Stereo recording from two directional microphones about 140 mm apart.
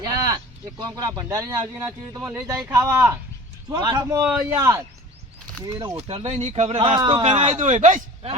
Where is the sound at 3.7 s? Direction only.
30° right (ahead or behind).